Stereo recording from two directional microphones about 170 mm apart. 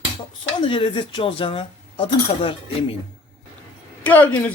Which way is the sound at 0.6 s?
30° left (ahead or behind).